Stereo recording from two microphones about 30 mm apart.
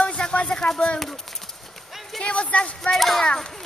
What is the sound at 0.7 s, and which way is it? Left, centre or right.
Speech, left.